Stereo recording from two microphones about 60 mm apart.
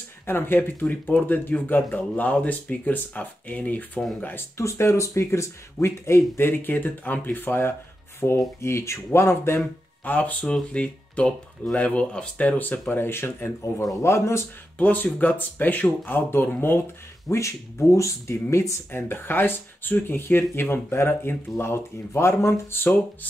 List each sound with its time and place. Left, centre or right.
0.3 s speech: left
4.6 s speech: left
8.2 s speech: left
8.5 s speech: left
10.0 s speech: left
12.9 s speech: left
14.8 s speech: left
17.3 s speech: left
18.9 s speech: left
21.7 s speech: left